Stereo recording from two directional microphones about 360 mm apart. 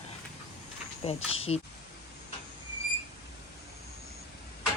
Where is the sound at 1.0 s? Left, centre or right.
Centre.